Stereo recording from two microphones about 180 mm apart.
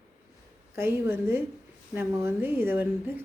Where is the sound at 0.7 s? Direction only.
15° right (ahead or behind).